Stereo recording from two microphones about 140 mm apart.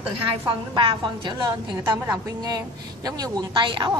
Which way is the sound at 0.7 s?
35° right (ahead or behind).